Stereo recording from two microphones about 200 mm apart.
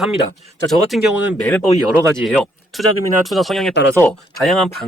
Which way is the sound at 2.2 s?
Centre (ahead or behind).